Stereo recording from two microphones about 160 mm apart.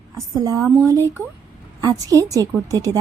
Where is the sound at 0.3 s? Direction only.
25° right (ahead or behind).